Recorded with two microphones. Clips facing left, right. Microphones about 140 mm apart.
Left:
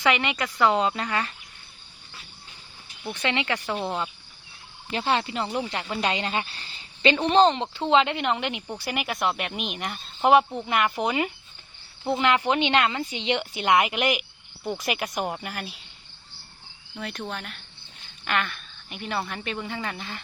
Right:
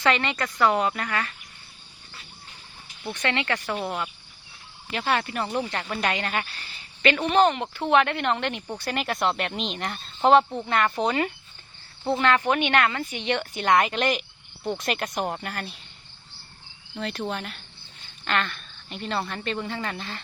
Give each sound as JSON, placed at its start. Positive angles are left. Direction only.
{"t": 0.1, "sound": "a woman's voice", "side_deg": 15}
{"t": 3.0, "sound": "a woman's voice", "side_deg": 10}
{"t": 8.6, "sound": "a woman's voice", "side_deg": -5}
{"t": 14.6, "sound": "a woman's voice", "side_deg": 0}
{"t": 17.0, "sound": "a woman's voice", "side_deg": 0}